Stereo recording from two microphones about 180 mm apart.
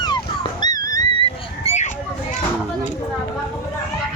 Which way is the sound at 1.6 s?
40° left (ahead or behind).